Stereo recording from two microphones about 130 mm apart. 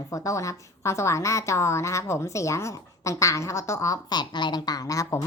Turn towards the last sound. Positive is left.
turn(degrees=25)  # may be behind; listen again after turning